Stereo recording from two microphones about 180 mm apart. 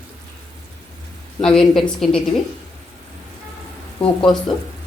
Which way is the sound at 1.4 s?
5° left (ahead or behind).